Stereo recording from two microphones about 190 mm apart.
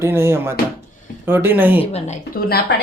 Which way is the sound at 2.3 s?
55° left (ahead or behind).